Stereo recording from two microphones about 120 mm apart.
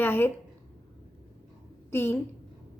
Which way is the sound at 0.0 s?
20° left (ahead or behind).